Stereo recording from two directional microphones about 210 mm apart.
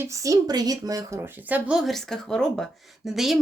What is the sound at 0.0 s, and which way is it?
A woman's voice, 15° right (ahead or behind).